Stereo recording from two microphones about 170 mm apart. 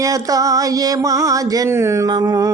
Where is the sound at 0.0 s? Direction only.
20° right (ahead or behind).